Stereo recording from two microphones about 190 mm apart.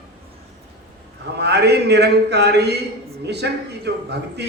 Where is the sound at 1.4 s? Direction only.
60° right (ahead or behind).